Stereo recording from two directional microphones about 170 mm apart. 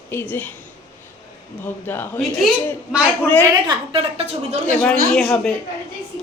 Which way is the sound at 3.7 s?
35° right (ahead or behind).